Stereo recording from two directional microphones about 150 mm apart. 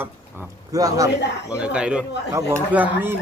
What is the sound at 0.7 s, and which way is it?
Speech, 25° right (ahead or behind).